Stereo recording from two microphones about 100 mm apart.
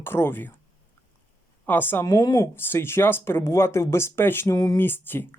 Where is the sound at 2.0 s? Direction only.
35° left (ahead or behind).